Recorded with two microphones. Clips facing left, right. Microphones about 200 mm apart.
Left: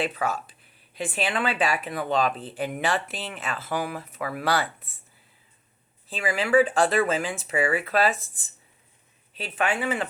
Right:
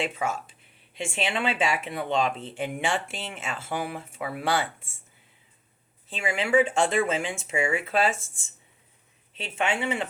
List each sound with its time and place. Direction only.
0.1 s speech: 25° right (ahead or behind)
6.1 s speech: 25° right (ahead or behind)
9.3 s speech: 25° right (ahead or behind)